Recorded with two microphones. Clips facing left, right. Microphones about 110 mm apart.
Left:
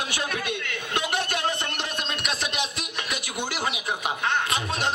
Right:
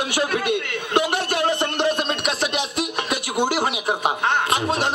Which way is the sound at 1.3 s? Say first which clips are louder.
Right 7 dB; 20° right (ahead or behind).